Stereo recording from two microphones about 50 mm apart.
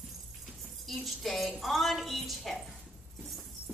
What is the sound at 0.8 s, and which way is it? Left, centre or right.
A woman's voice, centre.